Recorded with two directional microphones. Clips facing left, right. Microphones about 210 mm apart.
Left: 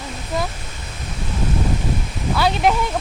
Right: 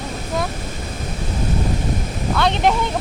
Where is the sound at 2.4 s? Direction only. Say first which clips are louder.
Even; 5° left (ahead or behind).